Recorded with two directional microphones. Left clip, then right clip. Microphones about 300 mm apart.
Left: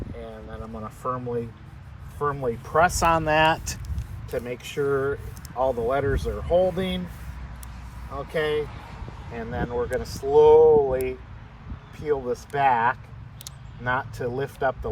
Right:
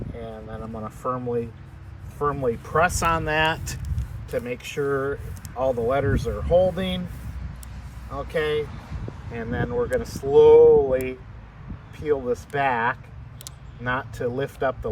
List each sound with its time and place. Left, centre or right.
0.8 s speech: centre
8.1 s speech: centre
8.7 s vehicle: left
9.3 s speech: centre